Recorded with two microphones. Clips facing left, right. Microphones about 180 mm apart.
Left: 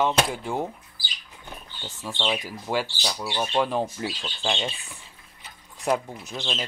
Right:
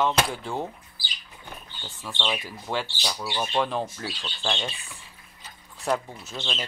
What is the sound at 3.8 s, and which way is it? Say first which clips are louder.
Speech: left 4 dB; 20° left (ahead or behind).